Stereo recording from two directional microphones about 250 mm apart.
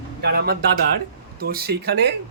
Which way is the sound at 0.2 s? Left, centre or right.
Right.